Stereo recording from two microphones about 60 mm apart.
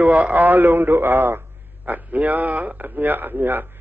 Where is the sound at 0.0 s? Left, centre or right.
Right.